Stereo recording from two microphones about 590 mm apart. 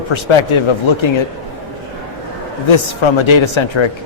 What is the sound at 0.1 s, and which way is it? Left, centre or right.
Speech, left.